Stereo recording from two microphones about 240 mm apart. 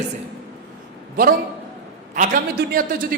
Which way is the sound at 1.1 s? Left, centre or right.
Right.